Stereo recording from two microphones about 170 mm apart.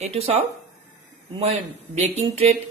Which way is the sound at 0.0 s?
35° right (ahead or behind).